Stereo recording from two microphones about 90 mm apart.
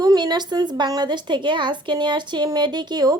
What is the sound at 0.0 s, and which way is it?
Speech, 45° right (ahead or behind).